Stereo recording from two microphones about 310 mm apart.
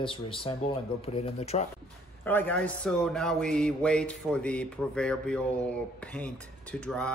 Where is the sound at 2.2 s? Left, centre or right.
Centre.